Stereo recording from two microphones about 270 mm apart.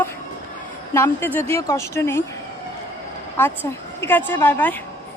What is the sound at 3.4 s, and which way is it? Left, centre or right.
A woman's voice, centre.